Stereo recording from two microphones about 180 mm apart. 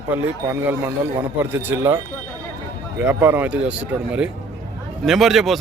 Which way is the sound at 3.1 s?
15° right (ahead or behind).